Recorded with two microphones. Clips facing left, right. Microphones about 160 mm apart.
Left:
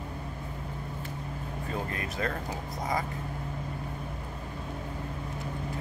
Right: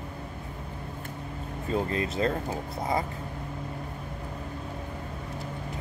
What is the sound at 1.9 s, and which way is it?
Speech, 25° right (ahead or behind).